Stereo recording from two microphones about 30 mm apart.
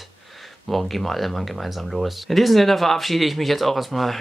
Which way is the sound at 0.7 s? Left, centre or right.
Centre.